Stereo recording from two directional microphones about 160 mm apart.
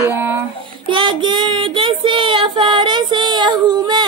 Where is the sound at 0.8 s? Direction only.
30° right (ahead or behind).